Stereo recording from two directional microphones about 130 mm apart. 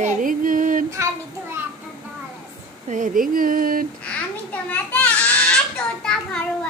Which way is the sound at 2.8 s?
85° right.